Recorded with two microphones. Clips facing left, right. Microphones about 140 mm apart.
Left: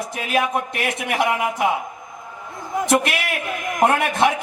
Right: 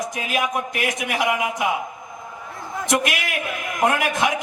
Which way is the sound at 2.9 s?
30° left (ahead or behind).